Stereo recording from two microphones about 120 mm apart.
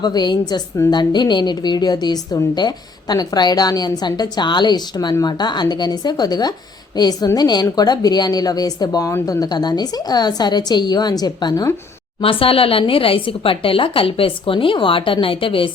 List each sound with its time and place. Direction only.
0.0 s a woman's voice: 35° left (ahead or behind)
12.2 s a woman's voice: 50° left (ahead or behind)